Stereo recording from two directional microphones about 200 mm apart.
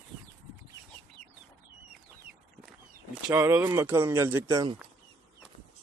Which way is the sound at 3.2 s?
10° right (ahead or behind).